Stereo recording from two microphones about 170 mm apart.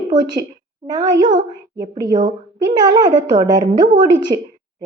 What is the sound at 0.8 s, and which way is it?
A woman's voice, 20° right (ahead or behind).